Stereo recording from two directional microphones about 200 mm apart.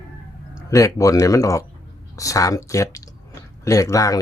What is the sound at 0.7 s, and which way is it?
Speech, 15° left (ahead or behind).